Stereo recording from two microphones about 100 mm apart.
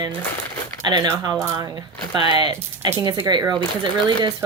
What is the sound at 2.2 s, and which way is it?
Speech, 50° right (ahead or behind).